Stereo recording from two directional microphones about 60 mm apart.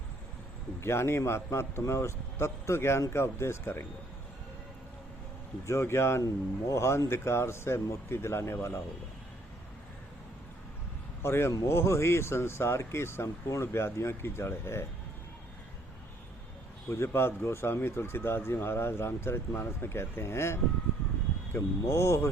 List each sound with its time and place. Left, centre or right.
0.8 s speech: left
5.6 s speech: left
11.2 s speech: left
16.9 s speech: left